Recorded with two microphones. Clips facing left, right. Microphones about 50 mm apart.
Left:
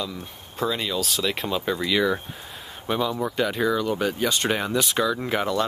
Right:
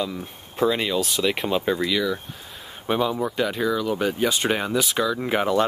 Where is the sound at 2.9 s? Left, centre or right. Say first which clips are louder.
Right 2 dB; centre.